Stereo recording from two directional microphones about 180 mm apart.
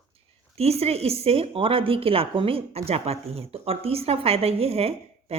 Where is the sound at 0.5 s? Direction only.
35° right (ahead or behind).